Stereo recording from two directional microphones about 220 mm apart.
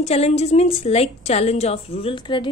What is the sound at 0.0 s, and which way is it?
A woman's voice, 30° left (ahead or behind).